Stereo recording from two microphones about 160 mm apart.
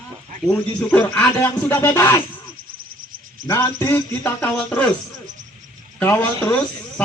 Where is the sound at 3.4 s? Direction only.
15° left (ahead or behind).